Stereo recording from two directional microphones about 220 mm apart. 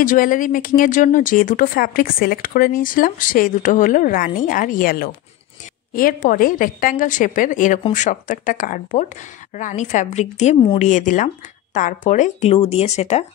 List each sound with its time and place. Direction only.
0.0 s speech: 35° left (ahead or behind)